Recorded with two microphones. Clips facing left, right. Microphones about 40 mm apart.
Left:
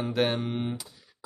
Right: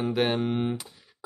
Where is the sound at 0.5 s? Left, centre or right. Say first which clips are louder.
Right 4 dB; centre.